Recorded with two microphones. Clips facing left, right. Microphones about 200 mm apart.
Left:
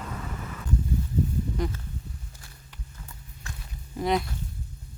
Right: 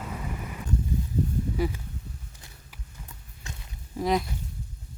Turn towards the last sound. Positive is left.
turn(degrees=0)  # may be behind; listen again after turning